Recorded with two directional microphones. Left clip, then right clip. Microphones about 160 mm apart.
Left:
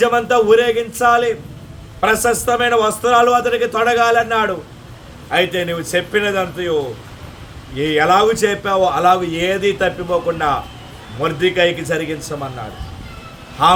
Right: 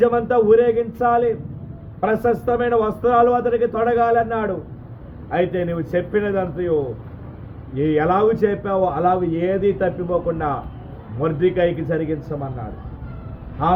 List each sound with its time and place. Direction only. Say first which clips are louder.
0.0 s a man's voice: left 3 dB; 15° left (ahead or behind)
7.8 s a man's voice: left 4 dB; 10° left (ahead or behind)